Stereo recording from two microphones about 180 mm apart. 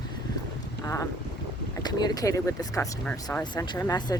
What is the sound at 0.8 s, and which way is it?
Boat, 15° left (ahead or behind).